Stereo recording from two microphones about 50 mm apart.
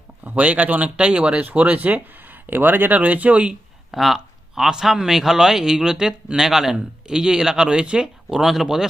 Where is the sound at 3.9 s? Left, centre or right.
Centre.